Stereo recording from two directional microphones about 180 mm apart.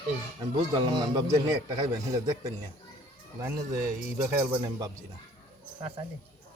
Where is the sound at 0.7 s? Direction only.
20° right (ahead or behind).